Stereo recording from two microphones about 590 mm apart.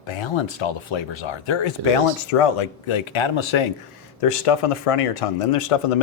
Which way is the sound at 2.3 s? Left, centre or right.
Left.